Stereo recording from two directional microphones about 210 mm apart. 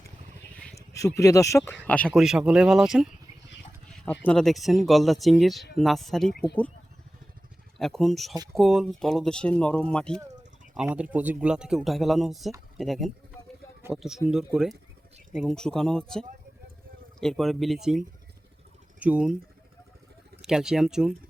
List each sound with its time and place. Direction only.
0.6 s speech: 15° left (ahead or behind)
7.8 s speech: centre (ahead or behind)
10.8 s speech: 5° right (ahead or behind)